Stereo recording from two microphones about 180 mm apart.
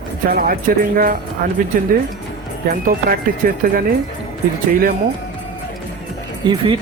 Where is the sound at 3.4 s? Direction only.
55° right (ahead or behind).